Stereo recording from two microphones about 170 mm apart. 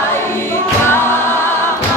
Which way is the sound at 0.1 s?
15° left (ahead or behind).